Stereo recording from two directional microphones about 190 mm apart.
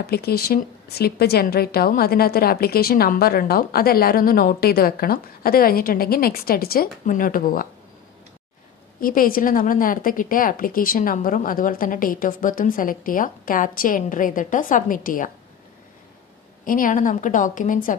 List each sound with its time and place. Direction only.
0.0 s a woman's voice: 55° left (ahead or behind)
9.0 s a woman's voice: 50° left (ahead or behind)
16.6 s a woman's voice: 45° left (ahead or behind)